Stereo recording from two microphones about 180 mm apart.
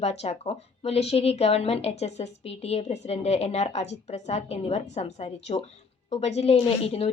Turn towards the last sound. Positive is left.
turn(degrees=35)  # may be behind; listen again after turning